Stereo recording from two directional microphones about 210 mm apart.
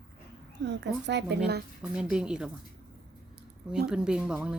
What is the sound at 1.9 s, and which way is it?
Speech, 5° right (ahead or behind).